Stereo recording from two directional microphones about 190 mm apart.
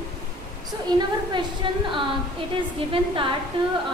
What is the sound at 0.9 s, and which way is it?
A woman's voice, 20° right (ahead or behind).